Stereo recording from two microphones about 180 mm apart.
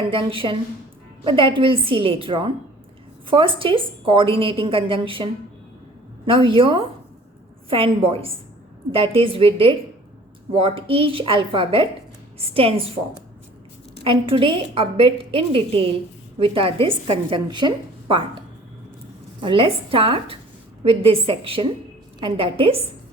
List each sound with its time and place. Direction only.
0.0 s a woman's voice: 30° right (ahead or behind)
14.0 s a woman's voice: 30° right (ahead or behind)
19.4 s a woman's voice: 30° right (ahead or behind)